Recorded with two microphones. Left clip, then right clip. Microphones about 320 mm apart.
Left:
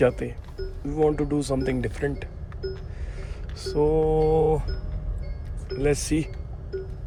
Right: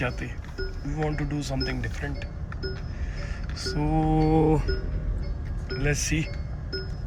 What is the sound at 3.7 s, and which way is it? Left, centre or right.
Mantra, centre.